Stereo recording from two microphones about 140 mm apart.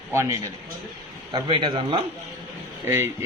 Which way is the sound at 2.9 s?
15° right (ahead or behind).